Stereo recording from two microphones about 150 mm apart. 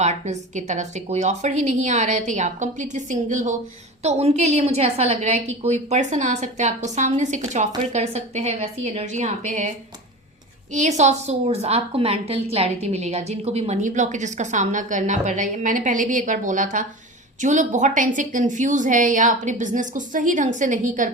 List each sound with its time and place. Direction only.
0.0 s a woman's voice: 50° right (ahead or behind)